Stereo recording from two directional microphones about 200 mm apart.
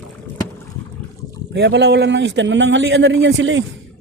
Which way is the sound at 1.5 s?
60° right (ahead or behind).